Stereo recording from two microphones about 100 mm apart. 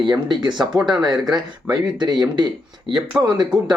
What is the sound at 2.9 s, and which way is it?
Speech, 5° right (ahead or behind).